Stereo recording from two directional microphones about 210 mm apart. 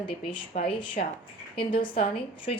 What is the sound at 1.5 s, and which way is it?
A woman's voice, 25° left (ahead or behind).